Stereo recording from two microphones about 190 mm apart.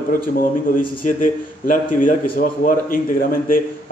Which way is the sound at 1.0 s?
45° left (ahead or behind).